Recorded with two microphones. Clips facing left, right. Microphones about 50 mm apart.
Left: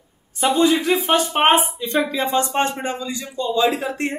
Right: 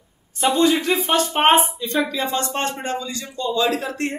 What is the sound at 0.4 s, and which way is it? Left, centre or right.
Speech, centre.